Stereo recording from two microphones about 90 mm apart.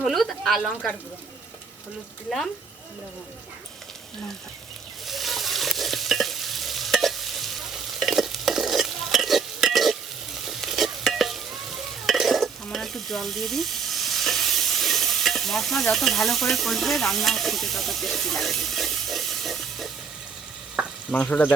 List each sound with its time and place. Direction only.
0.0 s speech: centre (ahead or behind)
5.0 s stir: centre (ahead or behind)
21.1 s speech: 15° left (ahead or behind)